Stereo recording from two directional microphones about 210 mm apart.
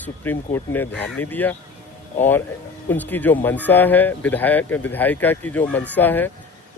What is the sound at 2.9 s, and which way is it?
Speech, 10° left (ahead or behind).